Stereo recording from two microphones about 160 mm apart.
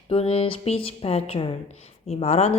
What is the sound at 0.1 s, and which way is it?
A woman's voice, 35° left (ahead or behind).